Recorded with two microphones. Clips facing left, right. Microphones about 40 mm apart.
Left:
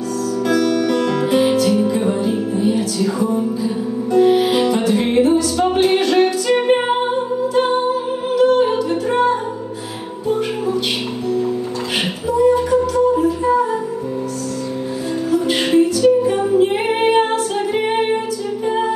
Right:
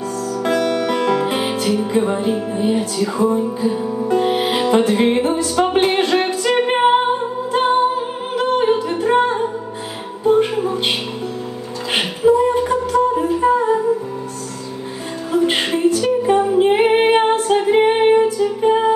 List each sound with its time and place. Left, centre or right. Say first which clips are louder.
0.5 s music: left 1 dB; right
12.3 s music: even; right
15.3 s music: left 2 dB; right
16.4 s female singing: right 2 dB; right